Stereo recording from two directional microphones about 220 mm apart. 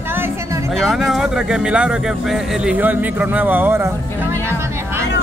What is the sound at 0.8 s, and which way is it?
Speech, centre (ahead or behind).